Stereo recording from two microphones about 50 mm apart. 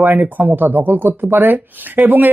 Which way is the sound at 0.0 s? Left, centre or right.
Right.